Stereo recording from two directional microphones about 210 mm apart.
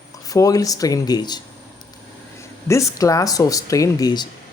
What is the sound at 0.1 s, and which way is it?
Speech, 15° left (ahead or behind).